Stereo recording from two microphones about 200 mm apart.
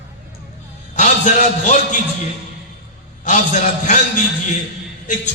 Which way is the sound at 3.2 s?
35° left (ahead or behind).